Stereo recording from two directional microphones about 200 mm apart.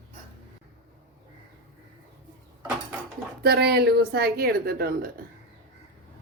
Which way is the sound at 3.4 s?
55° right (ahead or behind).